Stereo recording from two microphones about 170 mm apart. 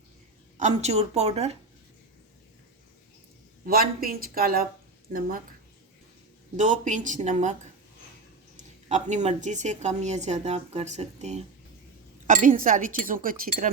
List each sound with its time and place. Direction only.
0.5 s a woman's voice: 45° right (ahead or behind)
3.7 s speech: 60° right (ahead or behind)
6.6 s a woman's voice: 45° right (ahead or behind)
8.5 s a woman's voice: 45° right (ahead or behind)